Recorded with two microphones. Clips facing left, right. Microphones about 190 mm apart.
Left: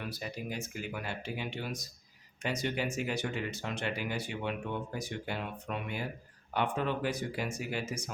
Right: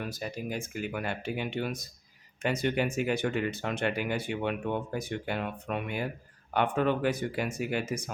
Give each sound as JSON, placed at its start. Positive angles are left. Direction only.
{"t": 0.1, "sound": "speech", "side_deg": -50}